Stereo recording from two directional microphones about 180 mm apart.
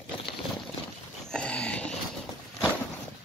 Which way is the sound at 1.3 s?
5° left (ahead or behind).